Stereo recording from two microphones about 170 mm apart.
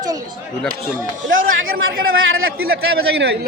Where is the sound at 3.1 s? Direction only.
75° right (ahead or behind).